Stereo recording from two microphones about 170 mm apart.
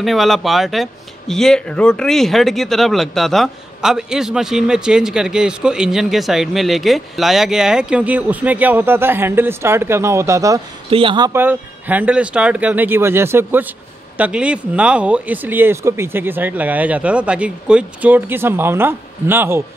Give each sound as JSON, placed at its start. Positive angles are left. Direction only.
{"t": 0.0, "sound": "speech", "side_deg": 0}
{"t": 10.9, "sound": "speech", "side_deg": -30}
{"t": 11.3, "sound": "speech", "side_deg": -10}